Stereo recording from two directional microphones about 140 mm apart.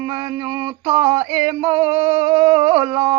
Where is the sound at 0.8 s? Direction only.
45° right (ahead or behind).